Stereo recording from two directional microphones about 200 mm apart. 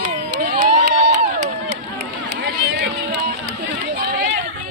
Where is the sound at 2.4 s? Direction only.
55° right (ahead or behind).